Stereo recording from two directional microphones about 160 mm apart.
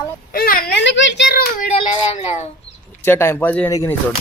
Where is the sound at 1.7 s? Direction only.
35° left (ahead or behind).